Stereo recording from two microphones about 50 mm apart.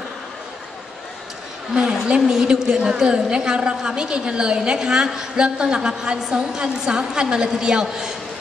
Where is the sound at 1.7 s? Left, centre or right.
Centre.